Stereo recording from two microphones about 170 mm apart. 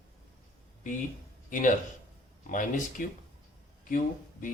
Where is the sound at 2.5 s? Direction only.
50° left (ahead or behind).